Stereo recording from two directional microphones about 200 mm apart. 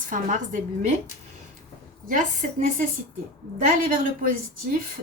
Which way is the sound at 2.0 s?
40° right (ahead or behind).